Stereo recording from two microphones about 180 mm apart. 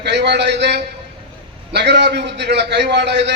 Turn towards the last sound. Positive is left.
turn(degrees=-70)  # may be behind; listen again after turning